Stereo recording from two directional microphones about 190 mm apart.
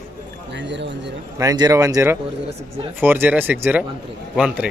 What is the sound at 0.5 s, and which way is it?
Speech, 70° right (ahead or behind).